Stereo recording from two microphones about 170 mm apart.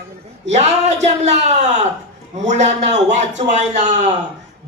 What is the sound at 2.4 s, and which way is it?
Speech, 45° right (ahead or behind).